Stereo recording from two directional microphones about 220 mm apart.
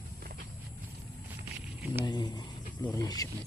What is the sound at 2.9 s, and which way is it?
Snake, 15° left (ahead or behind).